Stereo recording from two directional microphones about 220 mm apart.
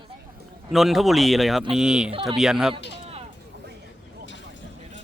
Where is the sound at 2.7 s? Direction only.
25° right (ahead or behind).